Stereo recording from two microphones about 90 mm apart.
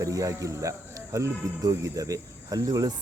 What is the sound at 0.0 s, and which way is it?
Speech, 40° right (ahead or behind).